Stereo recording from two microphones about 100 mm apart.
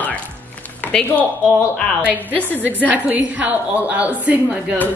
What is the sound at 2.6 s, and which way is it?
A woman's voice, 15° right (ahead or behind).